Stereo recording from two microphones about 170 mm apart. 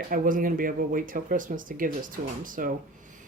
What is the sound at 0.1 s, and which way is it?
Speech, 55° right (ahead or behind).